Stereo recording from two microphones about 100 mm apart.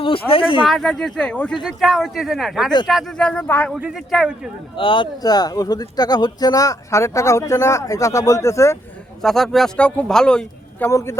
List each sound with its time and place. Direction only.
0.0 s speech: 65° left (ahead or behind)
0.7 s speech: 5° left (ahead or behind)
1.6 s speech: centre (ahead or behind)
3.4 s speech: 20° left (ahead or behind)
3.7 s speech: 5° right (ahead or behind)
4.8 s speech: 60° left (ahead or behind)
5.2 s speech: 40° left (ahead or behind)
9.2 s speech: centre (ahead or behind)
10.8 s speech: 25° left (ahead or behind)